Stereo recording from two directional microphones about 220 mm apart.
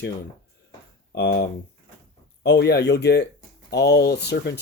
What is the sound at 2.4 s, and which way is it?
Speech, 50° left (ahead or behind).